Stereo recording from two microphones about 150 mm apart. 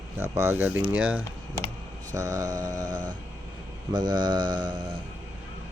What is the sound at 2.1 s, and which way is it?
Speech, 25° right (ahead or behind).